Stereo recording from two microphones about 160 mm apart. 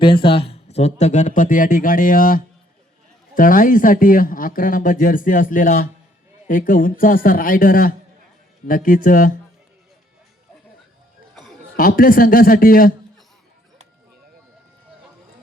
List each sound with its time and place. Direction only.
0.0 s speech: 30° left (ahead or behind); by 9.3 s 60° left (ahead or behind)
11.8 s speech: 60° left (ahead or behind)